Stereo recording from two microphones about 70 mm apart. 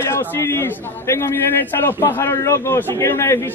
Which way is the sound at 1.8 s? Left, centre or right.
Left.